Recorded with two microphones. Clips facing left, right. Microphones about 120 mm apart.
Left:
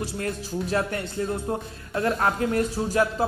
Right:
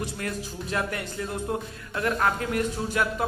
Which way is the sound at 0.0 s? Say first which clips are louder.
Left 2 dB; 30° left (ahead or behind).